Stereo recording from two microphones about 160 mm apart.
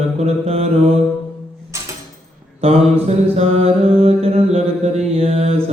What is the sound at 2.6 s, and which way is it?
Mantra, 40° right (ahead or behind).